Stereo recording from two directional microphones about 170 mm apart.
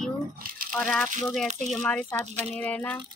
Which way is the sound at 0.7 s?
10° left (ahead or behind).